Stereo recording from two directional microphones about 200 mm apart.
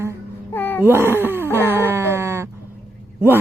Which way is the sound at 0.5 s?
10° left (ahead or behind).